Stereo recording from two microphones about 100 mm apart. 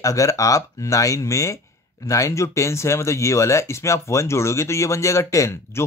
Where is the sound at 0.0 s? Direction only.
35° left (ahead or behind).